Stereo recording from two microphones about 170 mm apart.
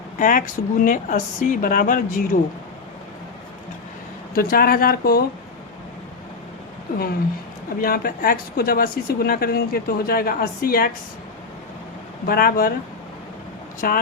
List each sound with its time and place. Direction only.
0.2 s speech: 50° left (ahead or behind)
4.4 s speech: 60° left (ahead or behind)
7.8 s speech: 60° left (ahead or behind)
12.2 s speech: 60° left (ahead or behind)
13.8 s speech: 60° left (ahead or behind)